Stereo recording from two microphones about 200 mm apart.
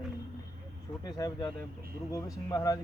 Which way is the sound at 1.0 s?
20° left (ahead or behind).